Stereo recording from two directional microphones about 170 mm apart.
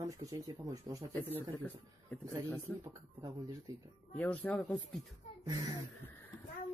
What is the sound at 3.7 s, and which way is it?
Speech, 20° right (ahead or behind).